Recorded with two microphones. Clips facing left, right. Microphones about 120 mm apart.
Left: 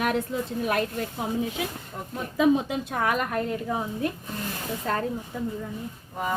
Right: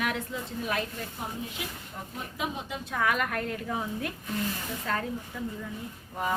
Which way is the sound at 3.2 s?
25° left (ahead or behind).